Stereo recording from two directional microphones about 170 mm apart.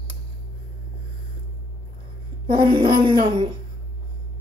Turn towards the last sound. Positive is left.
turn(degrees=-25)  # may be behind; listen again after turning